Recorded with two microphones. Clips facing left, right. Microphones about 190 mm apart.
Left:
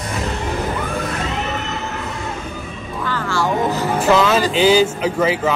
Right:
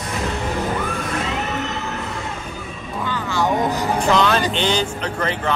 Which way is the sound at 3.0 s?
15° right (ahead or behind).